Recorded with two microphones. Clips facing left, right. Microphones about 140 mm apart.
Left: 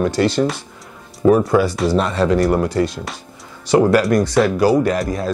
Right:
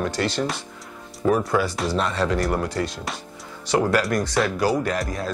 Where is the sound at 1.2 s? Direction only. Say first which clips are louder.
Left 7 dB; 25° left (ahead or behind).